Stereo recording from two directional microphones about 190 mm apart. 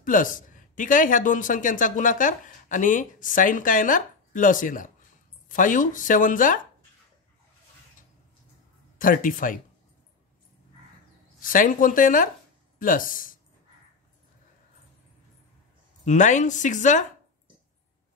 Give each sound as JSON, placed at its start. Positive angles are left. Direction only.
{"t": 0.0, "sound": "speech", "side_deg": 45}
{"t": 8.9, "sound": "speech", "side_deg": 45}
{"t": 11.3, "sound": "speech", "side_deg": 45}
{"t": 16.1, "sound": "a woman's voice", "side_deg": 40}